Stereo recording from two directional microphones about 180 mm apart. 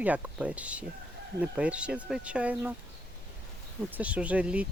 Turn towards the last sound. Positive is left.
turn(degrees=-5)  # may be behind; listen again after turning